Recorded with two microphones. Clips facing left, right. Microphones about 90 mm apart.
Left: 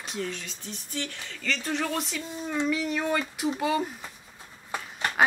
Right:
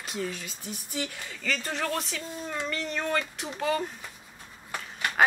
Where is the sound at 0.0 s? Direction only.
5° right (ahead or behind).